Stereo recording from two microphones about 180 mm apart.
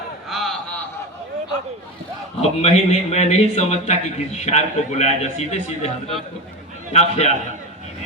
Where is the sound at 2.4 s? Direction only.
35° left (ahead or behind).